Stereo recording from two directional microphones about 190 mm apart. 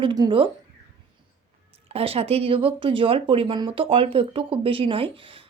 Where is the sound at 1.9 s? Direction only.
30° right (ahead or behind).